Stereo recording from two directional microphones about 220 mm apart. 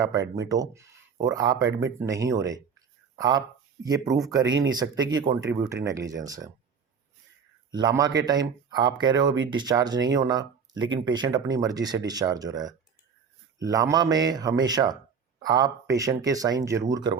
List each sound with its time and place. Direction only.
0.0 s speech: 15° right (ahead or behind)
7.7 s speech: 20° right (ahead or behind)